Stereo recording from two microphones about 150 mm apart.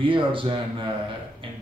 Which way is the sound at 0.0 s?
35° right (ahead or behind).